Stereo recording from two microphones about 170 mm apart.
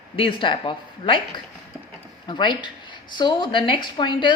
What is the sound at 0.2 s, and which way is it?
A woman's voice, 30° left (ahead or behind).